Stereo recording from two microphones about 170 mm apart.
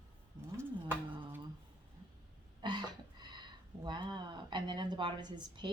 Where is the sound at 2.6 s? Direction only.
25° right (ahead or behind).